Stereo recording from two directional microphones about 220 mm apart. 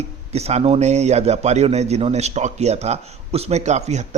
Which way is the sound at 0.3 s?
30° right (ahead or behind).